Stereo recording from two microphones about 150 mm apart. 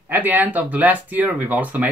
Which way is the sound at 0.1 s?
10° right (ahead or behind).